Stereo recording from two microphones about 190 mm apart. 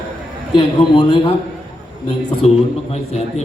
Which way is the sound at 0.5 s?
25° left (ahead or behind).